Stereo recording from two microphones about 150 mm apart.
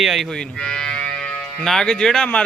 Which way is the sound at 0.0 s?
Centre (ahead or behind).